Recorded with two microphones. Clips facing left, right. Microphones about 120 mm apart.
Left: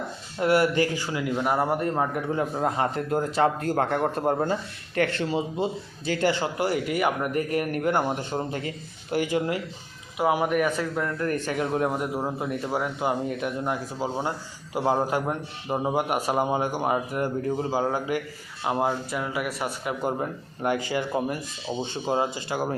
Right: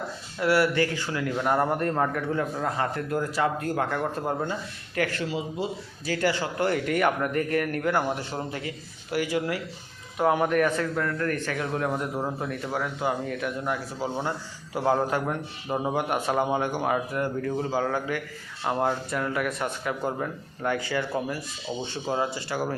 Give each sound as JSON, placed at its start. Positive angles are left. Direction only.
{"t": 0.3, "sound": "a man's voice", "side_deg": 20}
{"t": 2.3, "sound": "a man's voice", "side_deg": 25}
{"t": 3.8, "sound": "speech", "side_deg": 45}
{"t": 4.9, "sound": "a man's voice", "side_deg": 30}
{"t": 6.6, "sound": "a man's voice", "side_deg": 10}
{"t": 7.3, "sound": "a man's voice", "side_deg": 20}
{"t": 10.2, "sound": "a man's voice", "side_deg": 10}
{"t": 11.0, "sound": "a man's voice", "side_deg": 20}
{"t": 19.8, "sound": "a man's voice", "side_deg": 15}